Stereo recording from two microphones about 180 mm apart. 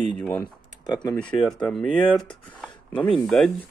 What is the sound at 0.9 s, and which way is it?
Speech, 20° left (ahead or behind).